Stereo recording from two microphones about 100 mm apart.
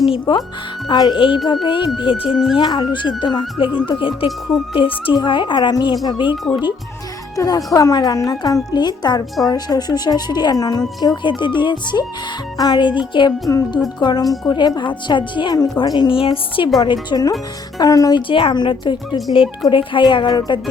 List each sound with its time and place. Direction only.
0.1 s speech: 50° left (ahead or behind)
2.3 s speech: centre (ahead or behind)
2.6 s speech: 50° left (ahead or behind)
7.3 s speech: 35° left (ahead or behind)
13.5 s speech: 30° left (ahead or behind)
14.0 s speech: 45° left (ahead or behind)
16.0 s speech: 65° left (ahead or behind)
16.8 s speech: 50° left (ahead or behind)
18.3 s speech: 60° left (ahead or behind)